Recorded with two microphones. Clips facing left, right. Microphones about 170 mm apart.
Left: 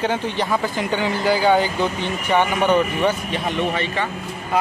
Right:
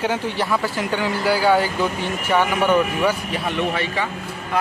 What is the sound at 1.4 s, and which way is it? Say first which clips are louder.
Speech: even; 20° left (ahead or behind).